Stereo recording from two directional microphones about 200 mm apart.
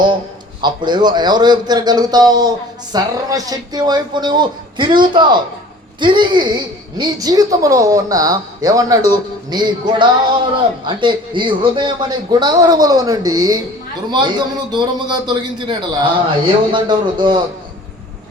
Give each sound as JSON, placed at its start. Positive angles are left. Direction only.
{"t": 0.6, "sound": "speech", "side_deg": -20}